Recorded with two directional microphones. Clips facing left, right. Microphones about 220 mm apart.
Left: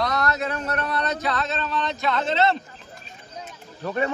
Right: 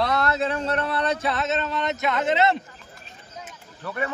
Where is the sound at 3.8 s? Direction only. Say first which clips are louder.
Left 4 dB; 25° left (ahead or behind).